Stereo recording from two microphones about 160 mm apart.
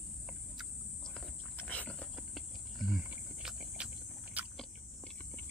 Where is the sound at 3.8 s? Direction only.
5° right (ahead or behind).